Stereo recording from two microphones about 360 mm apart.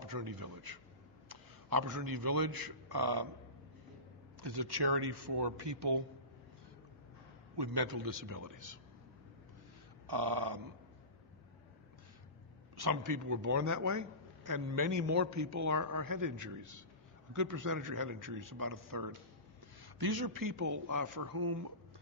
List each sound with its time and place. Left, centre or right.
0.0 s a man's voice: right
4.4 s speech: right
7.5 s a man's voice: right
10.0 s speech: right
12.7 s a man's voice: right
19.8 s a man's voice: right